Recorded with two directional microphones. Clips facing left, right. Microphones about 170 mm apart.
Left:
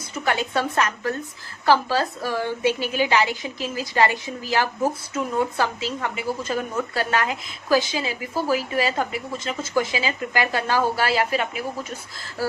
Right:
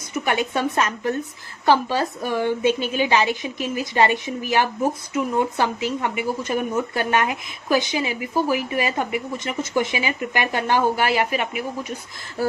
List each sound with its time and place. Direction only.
0.3 s speech: 20° right (ahead or behind)